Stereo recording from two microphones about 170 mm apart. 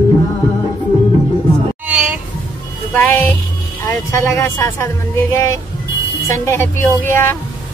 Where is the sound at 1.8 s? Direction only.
5° right (ahead or behind).